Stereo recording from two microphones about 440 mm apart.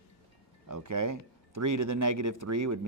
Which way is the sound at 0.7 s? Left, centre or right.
Right.